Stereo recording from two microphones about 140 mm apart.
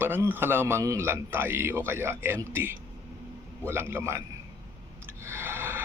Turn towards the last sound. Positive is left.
turn(degrees=-15)  # may be behind; listen again after turning